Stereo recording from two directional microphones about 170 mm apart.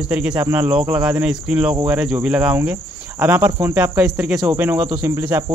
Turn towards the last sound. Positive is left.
turn(degrees=-15)  # may be behind; listen again after turning